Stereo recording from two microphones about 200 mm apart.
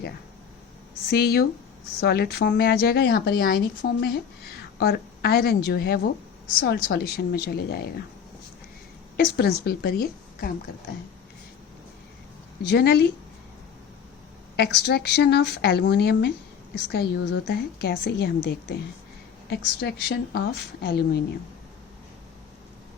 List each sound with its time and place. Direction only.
1.1 s speech: 50° left (ahead or behind)
9.1 s speech: 50° left (ahead or behind)
12.6 s speech: 55° left (ahead or behind)
14.5 s speech: 55° left (ahead or behind)